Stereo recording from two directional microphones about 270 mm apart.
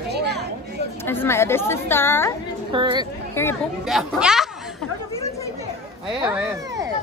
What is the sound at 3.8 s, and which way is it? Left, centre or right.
Speech, centre.